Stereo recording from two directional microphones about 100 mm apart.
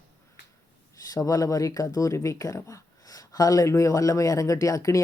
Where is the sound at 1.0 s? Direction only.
35° left (ahead or behind).